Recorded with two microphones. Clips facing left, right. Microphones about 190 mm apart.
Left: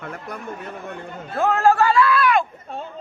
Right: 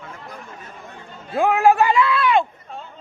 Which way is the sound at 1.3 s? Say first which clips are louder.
Right 2 dB; 15° right (ahead or behind).